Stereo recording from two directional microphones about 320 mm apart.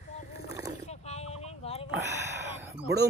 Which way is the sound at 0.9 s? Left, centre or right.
Centre.